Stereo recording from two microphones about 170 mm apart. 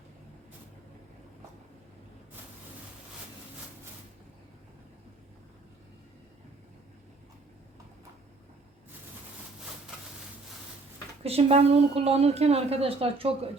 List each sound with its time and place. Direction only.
11.2 s a woman's voice: 35° right (ahead or behind)